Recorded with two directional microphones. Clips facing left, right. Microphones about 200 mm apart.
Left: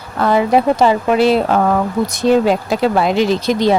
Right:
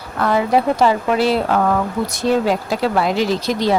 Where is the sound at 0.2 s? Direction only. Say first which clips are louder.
Left 3 dB; 20° left (ahead or behind).